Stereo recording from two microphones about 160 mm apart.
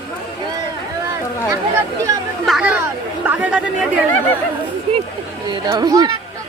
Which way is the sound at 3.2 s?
10° right (ahead or behind).